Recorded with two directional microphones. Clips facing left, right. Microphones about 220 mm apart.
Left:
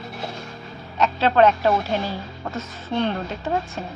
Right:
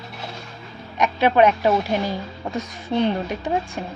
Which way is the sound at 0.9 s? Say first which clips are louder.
Right 1 dB; 15° right (ahead or behind).